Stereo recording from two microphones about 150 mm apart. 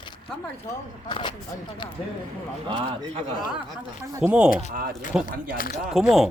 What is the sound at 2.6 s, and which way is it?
Speech, 35° right (ahead or behind).